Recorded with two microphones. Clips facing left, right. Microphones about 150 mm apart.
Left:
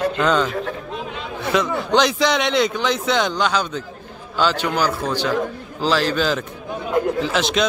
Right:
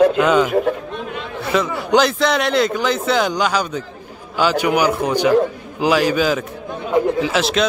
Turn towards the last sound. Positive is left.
turn(degrees=-5)  # may be behind; listen again after turning